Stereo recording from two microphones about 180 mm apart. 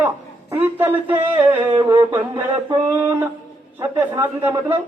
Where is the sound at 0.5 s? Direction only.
10° right (ahead or behind).